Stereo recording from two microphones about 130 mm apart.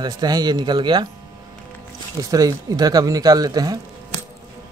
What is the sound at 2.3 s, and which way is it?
Speech, 25° right (ahead or behind).